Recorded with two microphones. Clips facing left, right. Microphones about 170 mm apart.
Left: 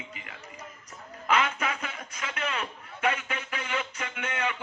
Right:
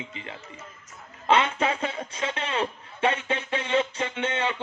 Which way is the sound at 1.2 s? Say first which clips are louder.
Right 5 dB; 30° right (ahead or behind).